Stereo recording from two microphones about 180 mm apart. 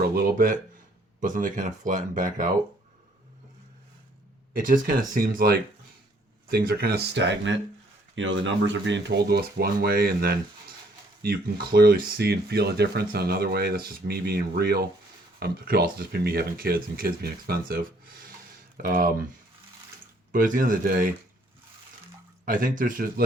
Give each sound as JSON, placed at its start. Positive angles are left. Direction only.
{"t": 0.0, "sound": "speech", "side_deg": -55}
{"t": 4.5, "sound": "speech", "side_deg": -50}
{"t": 18.8, "sound": "speech", "side_deg": -50}
{"t": 20.3, "sound": "speech", "side_deg": -50}
{"t": 22.4, "sound": "speech", "side_deg": -50}